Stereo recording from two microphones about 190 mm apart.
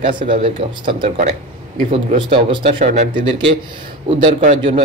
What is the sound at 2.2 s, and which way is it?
Speech, 25° right (ahead or behind).